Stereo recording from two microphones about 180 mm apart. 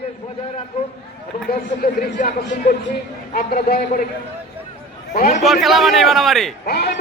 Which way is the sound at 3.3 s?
55° left (ahead or behind).